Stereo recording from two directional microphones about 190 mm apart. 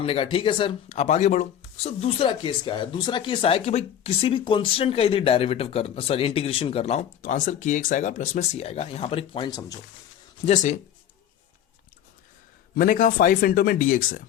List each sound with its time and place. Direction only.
0.0 s speech: 30° left (ahead or behind)
10.4 s speech: 40° left (ahead or behind)
12.7 s speech: 50° left (ahead or behind)